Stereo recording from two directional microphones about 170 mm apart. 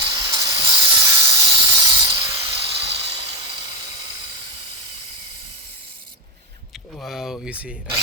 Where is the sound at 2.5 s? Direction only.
35° right (ahead or behind).